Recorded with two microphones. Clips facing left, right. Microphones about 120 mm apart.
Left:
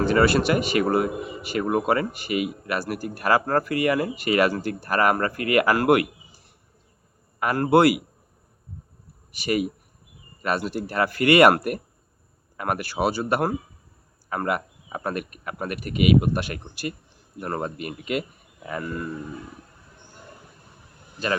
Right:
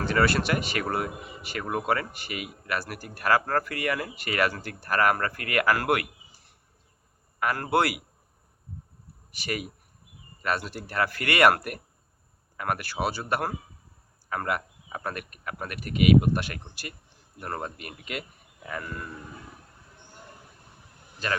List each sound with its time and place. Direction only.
0.0 s speech: 10° left (ahead or behind)
7.3 s speech: 20° left (ahead or behind)
9.4 s speech: 15° left (ahead or behind)